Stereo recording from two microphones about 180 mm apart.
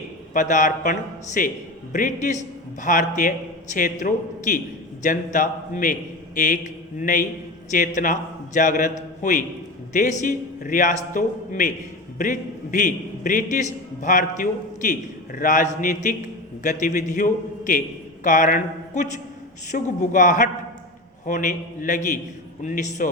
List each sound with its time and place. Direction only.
0.3 s a man's voice: 45° left (ahead or behind)